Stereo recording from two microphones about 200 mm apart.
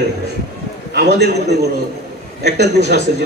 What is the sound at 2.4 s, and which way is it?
Speech, 55° right (ahead or behind).